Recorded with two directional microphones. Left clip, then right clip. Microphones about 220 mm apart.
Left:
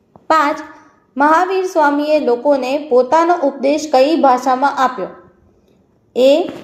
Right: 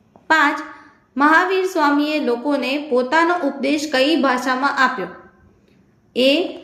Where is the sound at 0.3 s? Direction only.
5° left (ahead or behind).